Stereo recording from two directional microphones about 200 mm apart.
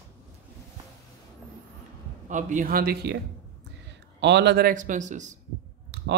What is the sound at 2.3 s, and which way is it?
Speech, 40° right (ahead or behind).